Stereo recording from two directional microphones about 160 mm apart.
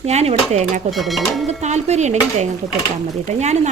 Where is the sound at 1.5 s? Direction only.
45° right (ahead or behind).